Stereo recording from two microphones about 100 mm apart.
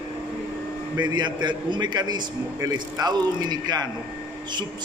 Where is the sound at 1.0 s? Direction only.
50° right (ahead or behind).